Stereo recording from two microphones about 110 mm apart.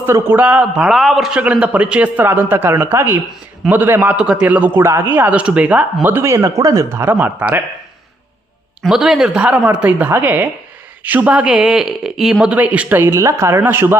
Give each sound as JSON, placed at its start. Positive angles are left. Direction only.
{"t": 0.0, "sound": "a man's voice", "side_deg": -20}
{"t": 8.8, "sound": "a man's voice", "side_deg": -5}